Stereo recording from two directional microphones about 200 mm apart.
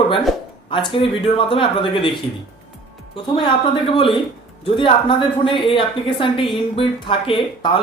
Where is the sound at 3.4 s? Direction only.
25° left (ahead or behind).